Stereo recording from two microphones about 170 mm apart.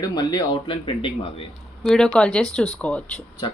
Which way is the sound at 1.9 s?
5° left (ahead or behind).